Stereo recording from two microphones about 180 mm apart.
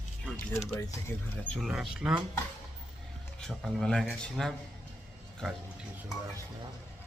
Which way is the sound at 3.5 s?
Centre (ahead or behind).